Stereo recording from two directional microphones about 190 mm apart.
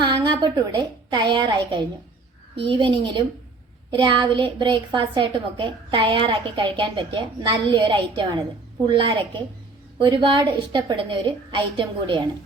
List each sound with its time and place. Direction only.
0.0 s a woman's voice: 25° right (ahead or behind)